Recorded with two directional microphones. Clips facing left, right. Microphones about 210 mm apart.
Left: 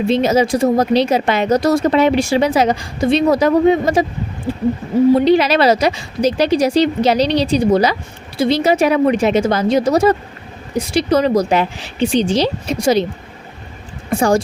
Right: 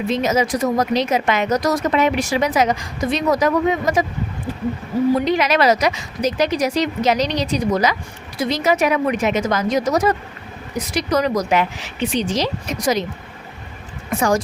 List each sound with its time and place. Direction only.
0.1 s a woman's voice: 30° left (ahead or behind)
14.1 s a woman's voice: 30° left (ahead or behind)